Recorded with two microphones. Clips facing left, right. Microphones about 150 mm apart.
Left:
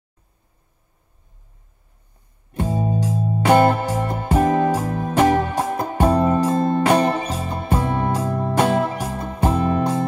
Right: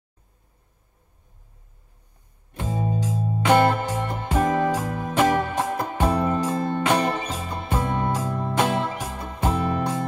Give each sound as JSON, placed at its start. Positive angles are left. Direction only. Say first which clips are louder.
{"t": 2.5, "sound": "music", "louder": "left 5 dB", "side_deg": 40}